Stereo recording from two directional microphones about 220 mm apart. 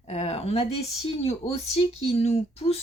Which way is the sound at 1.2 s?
30° left (ahead or behind).